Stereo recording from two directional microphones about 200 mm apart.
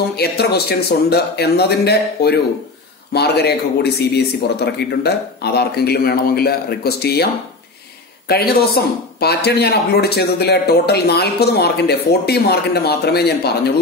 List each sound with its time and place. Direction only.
0.1 s speech: 55° left (ahead or behind)
8.3 s speech: 50° left (ahead or behind)